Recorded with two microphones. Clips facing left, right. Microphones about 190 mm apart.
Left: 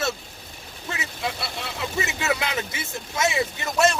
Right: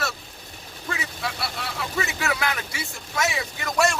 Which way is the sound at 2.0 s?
20° left (ahead or behind).